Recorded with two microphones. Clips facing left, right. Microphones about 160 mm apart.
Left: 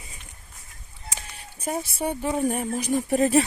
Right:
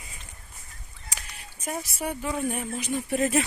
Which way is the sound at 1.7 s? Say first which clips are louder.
Left 4 dB; 30° left (ahead or behind).